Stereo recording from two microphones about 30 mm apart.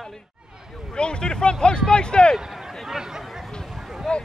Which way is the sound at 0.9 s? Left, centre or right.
Left.